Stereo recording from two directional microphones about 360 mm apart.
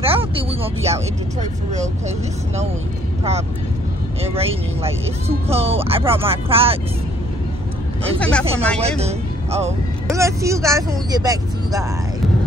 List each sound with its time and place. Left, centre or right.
0.0 s speech: centre
4.2 s speech: centre
8.2 s speech: centre
9.0 s speech: centre